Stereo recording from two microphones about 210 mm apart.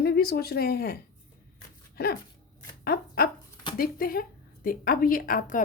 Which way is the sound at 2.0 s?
50° left (ahead or behind).